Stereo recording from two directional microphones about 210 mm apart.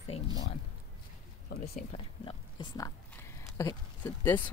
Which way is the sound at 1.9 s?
20° left (ahead or behind).